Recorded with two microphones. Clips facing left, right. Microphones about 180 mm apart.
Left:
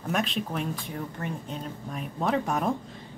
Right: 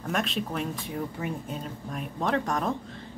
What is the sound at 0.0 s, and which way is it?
Speech, centre (ahead or behind).